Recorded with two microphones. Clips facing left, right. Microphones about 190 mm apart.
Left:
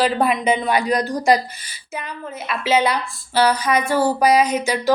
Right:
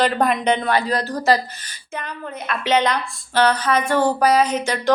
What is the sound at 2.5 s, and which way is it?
A woman's voice, 5° left (ahead or behind).